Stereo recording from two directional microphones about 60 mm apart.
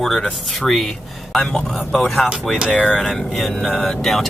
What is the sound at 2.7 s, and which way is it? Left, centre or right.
Speech, centre.